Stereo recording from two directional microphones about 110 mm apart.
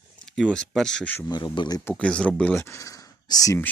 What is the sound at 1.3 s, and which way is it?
Speech, 45° left (ahead or behind).